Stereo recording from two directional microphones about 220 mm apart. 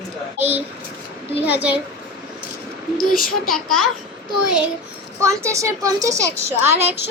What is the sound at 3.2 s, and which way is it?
Speech, 40° left (ahead or behind).